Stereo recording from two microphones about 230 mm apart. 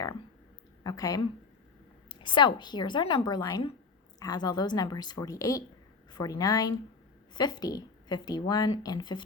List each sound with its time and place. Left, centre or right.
0.9 s a woman's voice: centre